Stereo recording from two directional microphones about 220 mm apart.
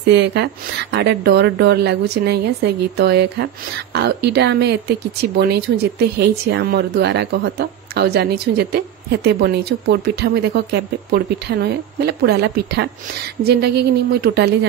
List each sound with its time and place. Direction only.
0.1 s speech: 50° right (ahead or behind)